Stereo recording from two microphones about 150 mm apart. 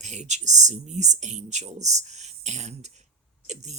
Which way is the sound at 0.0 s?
50° right (ahead or behind).